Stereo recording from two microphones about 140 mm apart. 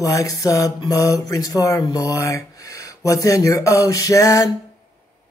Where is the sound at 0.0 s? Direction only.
25° left (ahead or behind).